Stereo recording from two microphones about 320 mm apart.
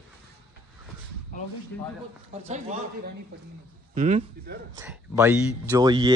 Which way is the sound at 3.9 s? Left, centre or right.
Right.